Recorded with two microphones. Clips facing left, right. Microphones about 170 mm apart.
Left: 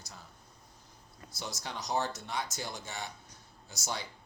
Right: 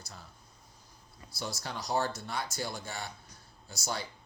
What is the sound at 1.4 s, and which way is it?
Speech, 20° left (ahead or behind).